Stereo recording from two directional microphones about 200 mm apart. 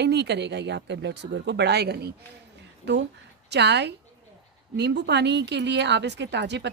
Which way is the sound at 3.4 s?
60° right (ahead or behind).